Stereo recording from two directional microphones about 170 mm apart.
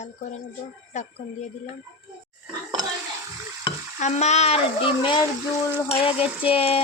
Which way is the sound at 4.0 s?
40° left (ahead or behind).